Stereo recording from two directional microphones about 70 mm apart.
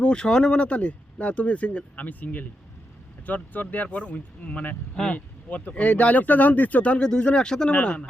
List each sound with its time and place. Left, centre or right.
0.0 s speech: centre